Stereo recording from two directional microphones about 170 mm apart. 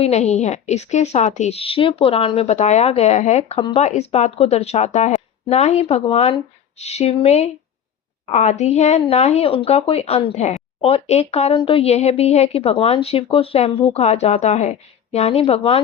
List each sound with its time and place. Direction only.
0.0 s speech: 40° left (ahead or behind)